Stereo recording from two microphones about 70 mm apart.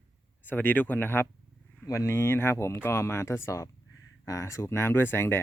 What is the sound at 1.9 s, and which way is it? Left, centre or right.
Speech, left.